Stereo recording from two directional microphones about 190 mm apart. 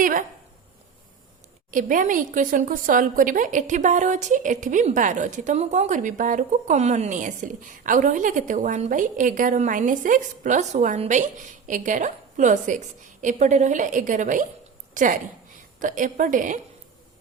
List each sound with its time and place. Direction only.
0.0 s speech: 45° right (ahead or behind)
1.7 s a woman's voice: 45° right (ahead or behind)